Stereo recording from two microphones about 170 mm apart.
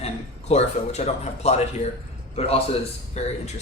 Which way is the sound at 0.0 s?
40° left (ahead or behind).